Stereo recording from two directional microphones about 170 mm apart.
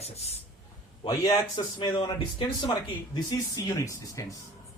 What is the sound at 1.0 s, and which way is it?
Speech, 25° left (ahead or behind).